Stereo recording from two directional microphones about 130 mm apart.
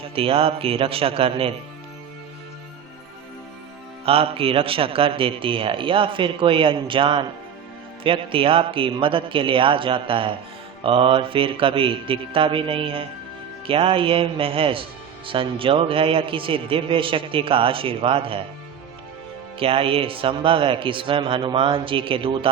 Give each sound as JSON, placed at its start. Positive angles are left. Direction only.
{"t": 0.0, "sound": "a man's voice", "side_deg": -45}
{"t": 4.0, "sound": "a man's voice", "side_deg": -45}
{"t": 19.5, "sound": "a man's voice", "side_deg": -45}